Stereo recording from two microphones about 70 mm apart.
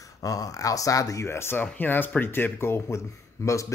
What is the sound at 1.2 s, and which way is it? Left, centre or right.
Speech, left.